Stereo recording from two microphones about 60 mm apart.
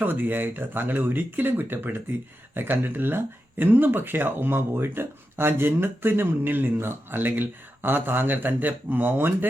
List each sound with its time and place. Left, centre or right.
0.0 s speech: right